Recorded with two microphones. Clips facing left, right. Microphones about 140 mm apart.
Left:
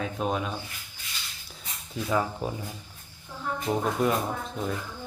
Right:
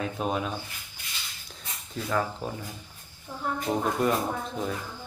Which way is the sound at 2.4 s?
15° left (ahead or behind).